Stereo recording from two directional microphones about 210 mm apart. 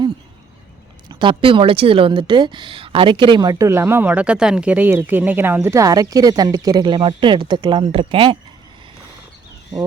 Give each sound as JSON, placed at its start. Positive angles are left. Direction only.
{"t": 1.0, "sound": "a woman's voice", "side_deg": -25}